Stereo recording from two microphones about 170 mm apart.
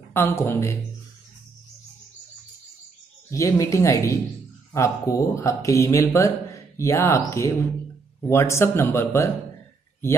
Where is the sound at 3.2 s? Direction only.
20° left (ahead or behind).